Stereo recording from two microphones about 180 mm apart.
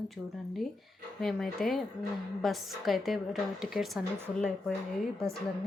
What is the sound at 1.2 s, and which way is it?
A woman's voice, centre (ahead or behind).